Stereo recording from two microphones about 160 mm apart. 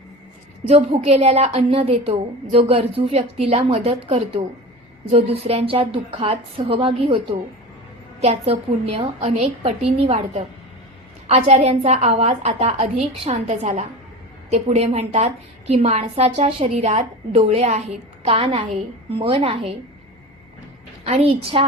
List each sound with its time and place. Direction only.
0.7 s a woman's voice: 40° right (ahead or behind)
21.0 s a woman's voice: 40° right (ahead or behind)